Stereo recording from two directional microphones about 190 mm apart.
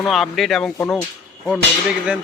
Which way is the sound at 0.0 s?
Centre (ahead or behind).